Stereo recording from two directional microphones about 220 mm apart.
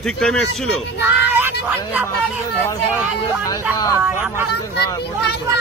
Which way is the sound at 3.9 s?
5° right (ahead or behind).